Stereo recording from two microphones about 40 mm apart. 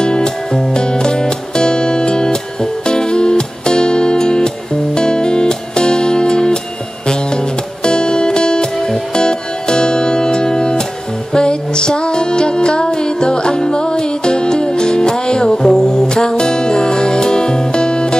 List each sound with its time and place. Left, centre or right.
0.0 s music: centre